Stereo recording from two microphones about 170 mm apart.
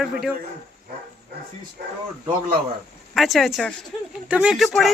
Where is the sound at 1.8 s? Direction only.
70° right (ahead or behind).